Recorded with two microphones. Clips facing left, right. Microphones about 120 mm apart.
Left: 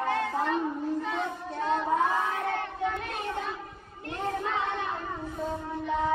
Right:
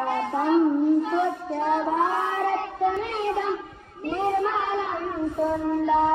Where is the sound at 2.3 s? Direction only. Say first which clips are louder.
Right 6 dB; 30° right (ahead or behind).